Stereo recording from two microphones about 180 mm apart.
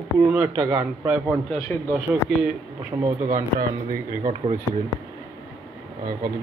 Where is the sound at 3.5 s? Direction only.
50° right (ahead or behind).